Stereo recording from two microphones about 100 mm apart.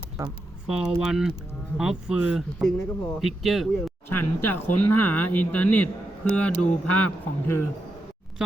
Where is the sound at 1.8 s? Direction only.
5° right (ahead or behind).